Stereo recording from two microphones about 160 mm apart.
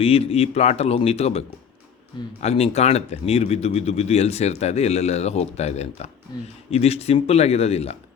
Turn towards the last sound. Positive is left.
turn(degrees=40)  # may be behind; listen again after turning